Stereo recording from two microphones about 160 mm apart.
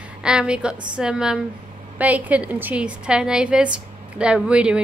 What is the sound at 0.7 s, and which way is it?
Speech, 30° right (ahead or behind).